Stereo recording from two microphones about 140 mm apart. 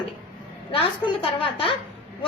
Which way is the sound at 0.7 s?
40° left (ahead or behind).